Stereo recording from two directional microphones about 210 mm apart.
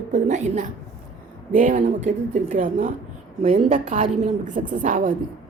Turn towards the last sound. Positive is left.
turn(degrees=-35)  # may be behind; listen again after turning